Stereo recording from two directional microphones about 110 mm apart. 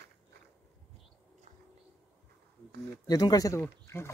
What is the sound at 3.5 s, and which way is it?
Speech, 25° left (ahead or behind).